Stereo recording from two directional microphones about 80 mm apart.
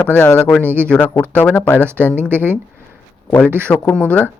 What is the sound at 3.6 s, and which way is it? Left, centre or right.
Speech, centre.